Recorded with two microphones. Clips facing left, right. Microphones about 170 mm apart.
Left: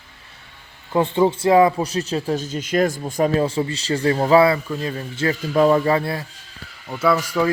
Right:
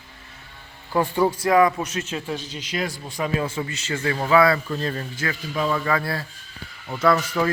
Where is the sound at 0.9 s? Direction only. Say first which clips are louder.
Left 3 dB; 20° left (ahead or behind).